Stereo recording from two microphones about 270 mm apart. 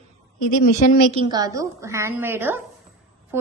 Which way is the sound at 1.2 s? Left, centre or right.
Centre.